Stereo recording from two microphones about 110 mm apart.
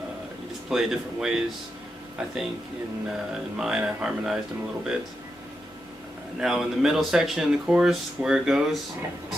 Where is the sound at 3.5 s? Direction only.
5° right (ahead or behind).